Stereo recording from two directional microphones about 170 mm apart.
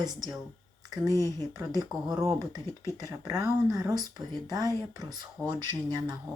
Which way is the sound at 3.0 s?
20° right (ahead or behind).